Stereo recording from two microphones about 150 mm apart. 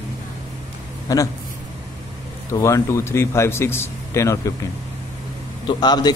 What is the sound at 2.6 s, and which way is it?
Speech, 20° left (ahead or behind).